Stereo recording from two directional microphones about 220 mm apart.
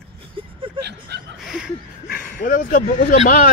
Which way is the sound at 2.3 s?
35° left (ahead or behind).